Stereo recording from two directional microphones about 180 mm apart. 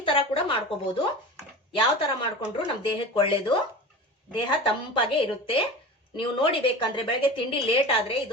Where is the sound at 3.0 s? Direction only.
30° left (ahead or behind).